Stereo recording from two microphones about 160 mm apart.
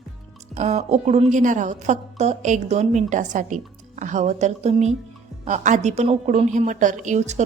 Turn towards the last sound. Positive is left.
turn(degrees=-45)  # may be behind; listen again after turning